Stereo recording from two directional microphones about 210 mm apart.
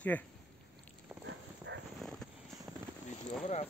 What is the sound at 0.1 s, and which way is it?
Speech, 5° left (ahead or behind).